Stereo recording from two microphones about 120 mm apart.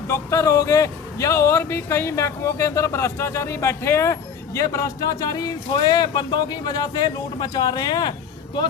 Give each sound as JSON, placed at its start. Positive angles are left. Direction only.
{"t": 0.1, "sound": "speech", "side_deg": 25}